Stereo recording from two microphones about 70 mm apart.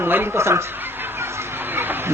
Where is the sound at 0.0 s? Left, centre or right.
Right.